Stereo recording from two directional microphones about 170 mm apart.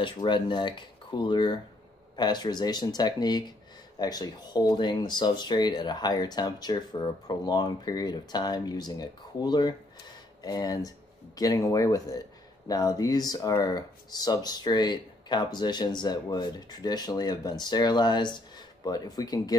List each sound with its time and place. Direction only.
0.0 s speech: 30° left (ahead or behind)